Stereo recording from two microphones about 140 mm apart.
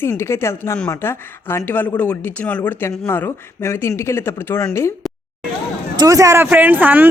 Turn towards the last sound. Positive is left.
turn(degrees=-10)  # may be behind; listen again after turning